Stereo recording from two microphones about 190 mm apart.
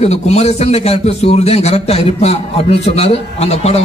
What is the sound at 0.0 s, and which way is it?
A man's voice, 35° left (ahead or behind).